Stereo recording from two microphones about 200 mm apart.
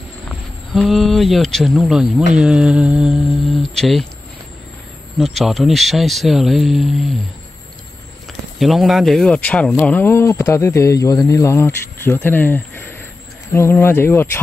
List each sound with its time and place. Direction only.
0.3 s speech: centre (ahead or behind)
5.2 s speech: centre (ahead or behind)
8.5 s speech: centre (ahead or behind)